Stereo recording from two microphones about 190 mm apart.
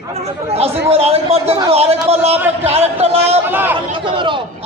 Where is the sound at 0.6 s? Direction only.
30° right (ahead or behind).